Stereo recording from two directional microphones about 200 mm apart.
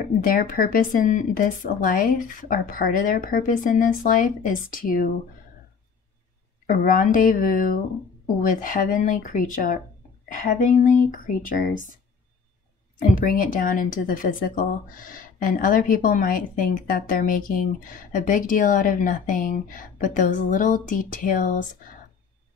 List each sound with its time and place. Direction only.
0.0 s speech: 45° left (ahead or behind)
6.6 s a woman's voice: 45° left (ahead or behind)
13.0 s a woman's voice: 40° left (ahead or behind)